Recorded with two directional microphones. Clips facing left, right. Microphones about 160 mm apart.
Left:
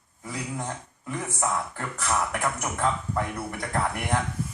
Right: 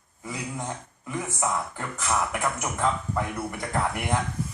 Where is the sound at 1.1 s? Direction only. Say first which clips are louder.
Even; 5° right (ahead or behind).